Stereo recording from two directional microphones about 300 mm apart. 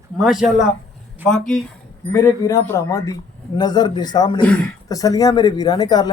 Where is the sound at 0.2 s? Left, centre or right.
Centre.